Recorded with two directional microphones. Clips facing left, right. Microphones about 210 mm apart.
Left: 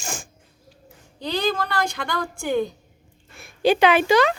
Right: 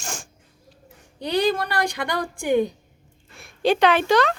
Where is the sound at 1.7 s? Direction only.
15° right (ahead or behind).